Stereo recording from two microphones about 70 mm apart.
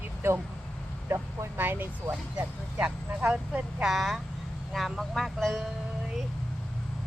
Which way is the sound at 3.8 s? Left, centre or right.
Centre.